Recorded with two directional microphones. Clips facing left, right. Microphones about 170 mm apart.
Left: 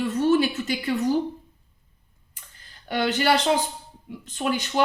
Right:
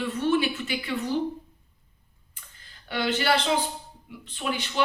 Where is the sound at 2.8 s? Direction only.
45° left (ahead or behind).